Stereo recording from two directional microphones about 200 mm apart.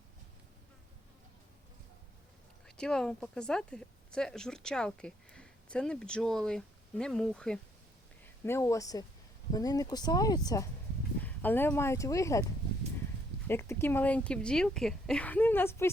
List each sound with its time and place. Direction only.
2.6 s a woman's voice: 5° left (ahead or behind)
13.5 s a woman's voice: 10° left (ahead or behind)